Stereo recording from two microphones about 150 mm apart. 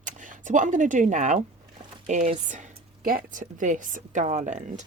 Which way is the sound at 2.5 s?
65° right (ahead or behind).